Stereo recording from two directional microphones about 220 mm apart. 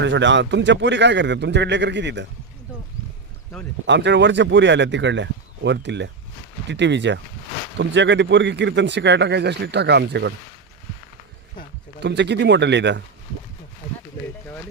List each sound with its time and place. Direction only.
0.0 s a man's voice: 55° right (ahead or behind)
3.8 s a man's voice: 50° right (ahead or behind)
12.0 s a man's voice: 50° right (ahead or behind)